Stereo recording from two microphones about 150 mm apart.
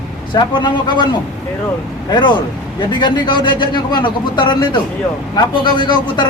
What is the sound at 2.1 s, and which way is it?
A man's voice, 30° left (ahead or behind).